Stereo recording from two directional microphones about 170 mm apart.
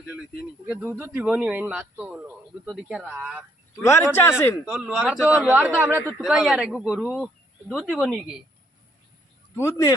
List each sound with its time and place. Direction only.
0.6 s speech: 10° right (ahead or behind)
3.8 s speech: 15° left (ahead or behind)
4.6 s a man's voice: 5° right (ahead or behind)
9.6 s speech: 15° left (ahead or behind)